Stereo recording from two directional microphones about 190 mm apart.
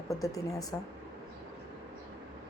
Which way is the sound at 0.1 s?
20° left (ahead or behind).